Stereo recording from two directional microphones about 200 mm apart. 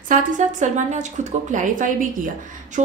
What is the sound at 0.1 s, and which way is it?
A woman's voice, 40° right (ahead or behind).